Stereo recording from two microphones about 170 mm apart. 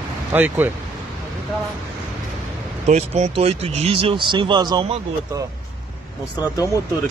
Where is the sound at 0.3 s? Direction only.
10° right (ahead or behind).